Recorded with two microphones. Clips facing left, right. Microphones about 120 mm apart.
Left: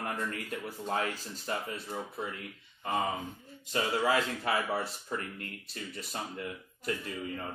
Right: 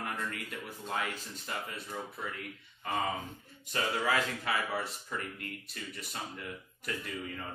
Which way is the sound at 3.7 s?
25° left (ahead or behind).